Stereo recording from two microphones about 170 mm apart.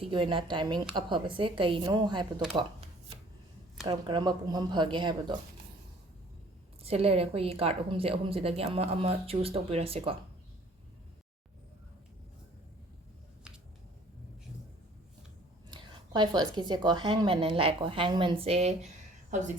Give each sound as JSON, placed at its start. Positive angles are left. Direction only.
{"t": 0.0, "sound": "a woman's voice", "side_deg": -30}
{"t": 3.8, "sound": "a woman's voice", "side_deg": -25}
{"t": 6.8, "sound": "a woman's voice", "side_deg": -35}
{"t": 15.7, "sound": "a woman's voice", "side_deg": -25}